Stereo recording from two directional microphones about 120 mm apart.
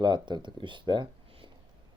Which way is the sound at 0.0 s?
40° right (ahead or behind).